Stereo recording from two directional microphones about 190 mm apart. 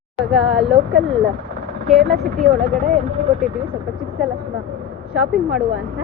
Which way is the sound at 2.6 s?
40° right (ahead or behind).